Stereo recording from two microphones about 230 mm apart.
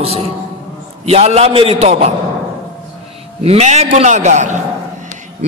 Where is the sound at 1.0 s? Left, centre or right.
Right.